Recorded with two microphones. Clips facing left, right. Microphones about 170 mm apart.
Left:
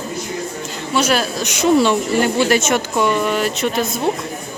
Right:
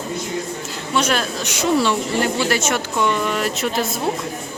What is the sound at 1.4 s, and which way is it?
Speech, 20° left (ahead or behind).